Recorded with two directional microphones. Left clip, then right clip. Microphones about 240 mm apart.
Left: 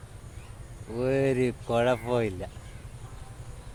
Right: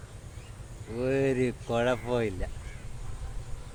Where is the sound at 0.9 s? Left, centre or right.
Left.